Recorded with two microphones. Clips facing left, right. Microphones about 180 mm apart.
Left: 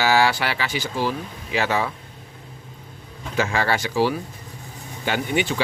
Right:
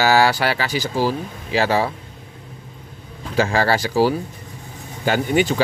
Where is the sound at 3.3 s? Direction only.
35° right (ahead or behind).